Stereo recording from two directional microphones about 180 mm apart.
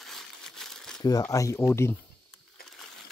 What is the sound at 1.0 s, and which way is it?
Speech, 20° left (ahead or behind).